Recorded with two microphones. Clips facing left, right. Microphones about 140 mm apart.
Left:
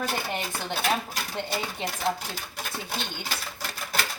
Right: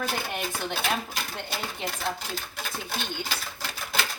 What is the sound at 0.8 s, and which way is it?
Speech, centre (ahead or behind).